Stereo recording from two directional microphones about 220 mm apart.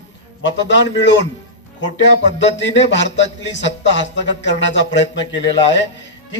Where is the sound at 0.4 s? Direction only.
55° left (ahead or behind).